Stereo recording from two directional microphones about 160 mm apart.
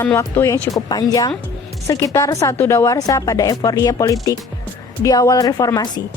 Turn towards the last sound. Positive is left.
turn(degrees=25)  # may be behind; listen again after turning